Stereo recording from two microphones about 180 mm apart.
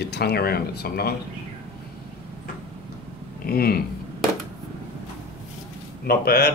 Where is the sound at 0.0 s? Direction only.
65° left (ahead or behind).